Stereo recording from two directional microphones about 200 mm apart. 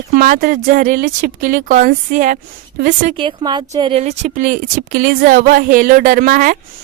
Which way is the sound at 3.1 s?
25° right (ahead or behind).